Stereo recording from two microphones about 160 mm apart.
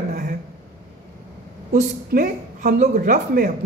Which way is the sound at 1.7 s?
60° right (ahead or behind).